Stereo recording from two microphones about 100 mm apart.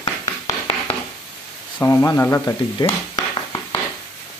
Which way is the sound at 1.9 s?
30° left (ahead or behind).